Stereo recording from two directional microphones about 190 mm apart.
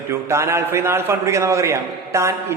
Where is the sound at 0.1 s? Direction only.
15° right (ahead or behind).